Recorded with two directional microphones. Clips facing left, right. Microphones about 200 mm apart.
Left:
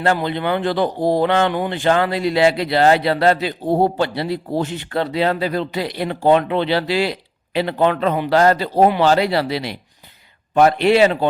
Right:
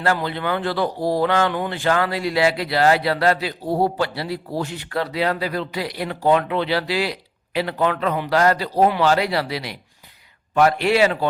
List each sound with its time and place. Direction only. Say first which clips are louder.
0.0 s speech: left 3 dB; 20° left (ahead or behind)